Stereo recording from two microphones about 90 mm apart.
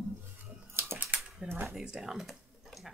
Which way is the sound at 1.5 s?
25° right (ahead or behind).